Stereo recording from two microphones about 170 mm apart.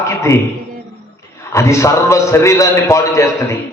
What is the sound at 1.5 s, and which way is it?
A man's voice, 15° left (ahead or behind).